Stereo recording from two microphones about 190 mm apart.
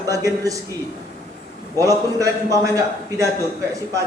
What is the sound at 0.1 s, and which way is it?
Speech, 15° right (ahead or behind).